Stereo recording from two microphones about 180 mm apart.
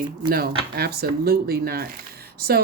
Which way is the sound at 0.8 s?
60° right (ahead or behind).